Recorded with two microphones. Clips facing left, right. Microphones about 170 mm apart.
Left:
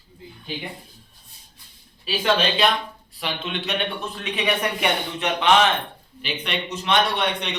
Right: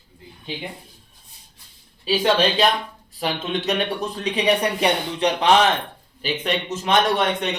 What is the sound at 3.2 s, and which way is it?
A man's voice, 40° right (ahead or behind).